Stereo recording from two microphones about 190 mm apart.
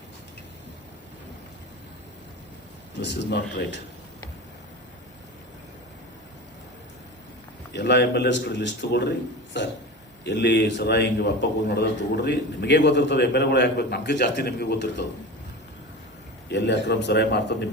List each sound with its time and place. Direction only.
2.9 s speech: 65° left (ahead or behind)
7.7 s a man's voice: 65° left (ahead or behind)
9.5 s burping: 65° left (ahead or behind)
10.2 s a man's voice: 65° left (ahead or behind)
16.5 s a man's voice: 65° left (ahead or behind)